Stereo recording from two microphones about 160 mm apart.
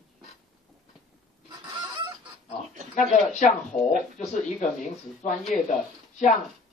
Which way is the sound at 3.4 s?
55° left (ahead or behind).